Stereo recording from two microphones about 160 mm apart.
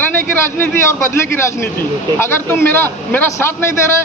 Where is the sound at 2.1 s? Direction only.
15° left (ahead or behind).